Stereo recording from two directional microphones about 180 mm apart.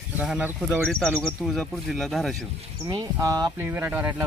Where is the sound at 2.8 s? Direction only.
20° right (ahead or behind).